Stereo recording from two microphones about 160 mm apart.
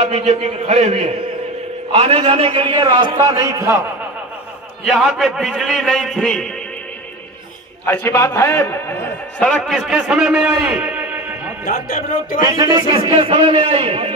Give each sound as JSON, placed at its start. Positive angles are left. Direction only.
{"t": 0.1, "sound": "a man's voice", "side_deg": -45}
{"t": 4.8, "sound": "a man's voice", "side_deg": 0}
{"t": 7.8, "sound": "a man's voice", "side_deg": 15}
{"t": 11.6, "sound": "speech", "side_deg": 65}
{"t": 12.4, "sound": "a man's voice", "side_deg": -25}